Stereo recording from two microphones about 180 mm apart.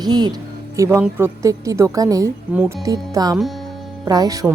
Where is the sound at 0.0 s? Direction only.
25° right (ahead or behind).